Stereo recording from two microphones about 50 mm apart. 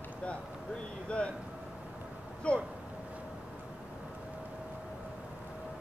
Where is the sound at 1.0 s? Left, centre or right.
Left.